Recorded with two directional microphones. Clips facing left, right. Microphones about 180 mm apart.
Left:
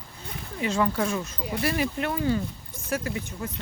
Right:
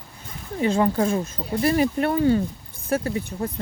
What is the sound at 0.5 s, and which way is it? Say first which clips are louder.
Speech: right 5 dB; 30° right (ahead or behind).